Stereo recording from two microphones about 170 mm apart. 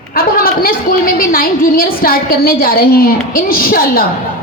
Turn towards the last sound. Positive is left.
turn(degrees=60)  # may be behind; listen again after turning